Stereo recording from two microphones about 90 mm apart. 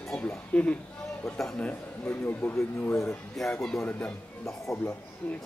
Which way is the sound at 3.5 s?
10° left (ahead or behind).